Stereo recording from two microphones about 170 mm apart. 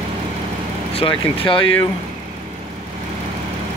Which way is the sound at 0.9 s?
30° left (ahead or behind).